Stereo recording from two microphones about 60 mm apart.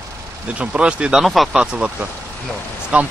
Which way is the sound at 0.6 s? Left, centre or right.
Centre.